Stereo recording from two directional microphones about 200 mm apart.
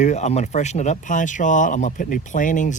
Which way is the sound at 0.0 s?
35° left (ahead or behind).